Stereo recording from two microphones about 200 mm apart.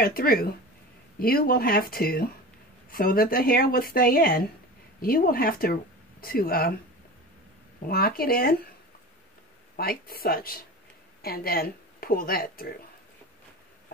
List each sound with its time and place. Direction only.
0.0 s speech: 50° left (ahead or behind)
7.8 s speech: 50° left (ahead or behind)
9.8 s speech: 50° left (ahead or behind)